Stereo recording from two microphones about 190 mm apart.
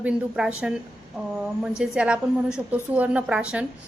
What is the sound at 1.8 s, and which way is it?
A woman's voice, 5° right (ahead or behind).